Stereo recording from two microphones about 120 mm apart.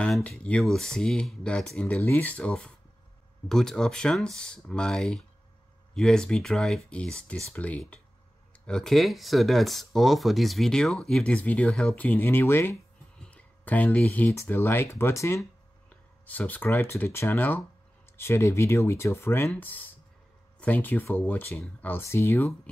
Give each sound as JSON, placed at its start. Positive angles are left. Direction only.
{"t": 0.0, "sound": "speech", "side_deg": 5}
{"t": 13.2, "sound": "a sound", "side_deg": 15}
{"t": 14.3, "sound": "speech", "side_deg": 20}